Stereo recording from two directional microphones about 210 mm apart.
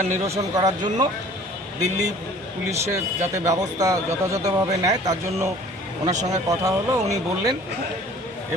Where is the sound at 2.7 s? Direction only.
10° right (ahead or behind).